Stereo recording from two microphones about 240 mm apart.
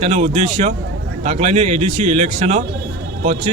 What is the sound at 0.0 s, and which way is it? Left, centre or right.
A man's voice, right.